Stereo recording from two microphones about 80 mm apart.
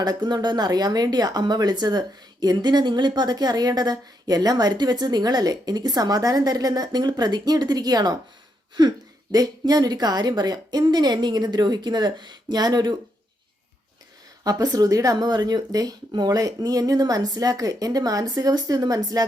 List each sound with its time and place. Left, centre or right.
0.0 s speech: right
14.4 s speech: right